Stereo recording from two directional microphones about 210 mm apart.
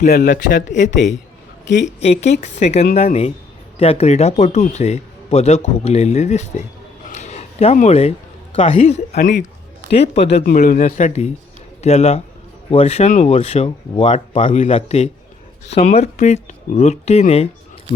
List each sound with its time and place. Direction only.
0.0 s a man's voice: 40° left (ahead or behind)
7.1 s a sound: 30° left (ahead or behind)
8.5 s a man's voice: 35° left (ahead or behind)
10.4 s a man's voice: 40° left (ahead or behind)